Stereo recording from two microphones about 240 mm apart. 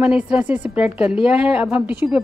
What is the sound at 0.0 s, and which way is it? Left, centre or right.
Speech, centre.